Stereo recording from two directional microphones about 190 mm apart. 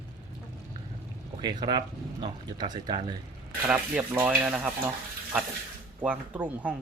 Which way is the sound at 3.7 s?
10° right (ahead or behind).